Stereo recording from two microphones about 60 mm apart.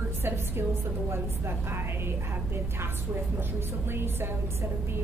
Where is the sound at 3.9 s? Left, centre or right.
Right.